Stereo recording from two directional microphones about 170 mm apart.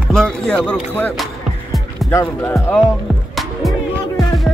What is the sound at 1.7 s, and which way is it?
Music, centre (ahead or behind).